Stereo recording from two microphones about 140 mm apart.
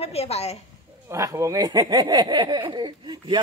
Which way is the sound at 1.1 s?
20° right (ahead or behind).